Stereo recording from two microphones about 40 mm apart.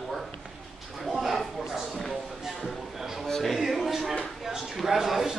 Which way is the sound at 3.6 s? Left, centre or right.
Centre.